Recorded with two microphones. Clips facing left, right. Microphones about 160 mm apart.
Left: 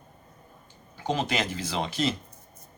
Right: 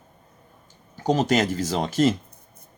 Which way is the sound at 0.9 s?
40° right (ahead or behind).